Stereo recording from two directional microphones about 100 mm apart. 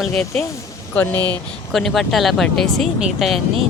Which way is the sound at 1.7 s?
5° left (ahead or behind).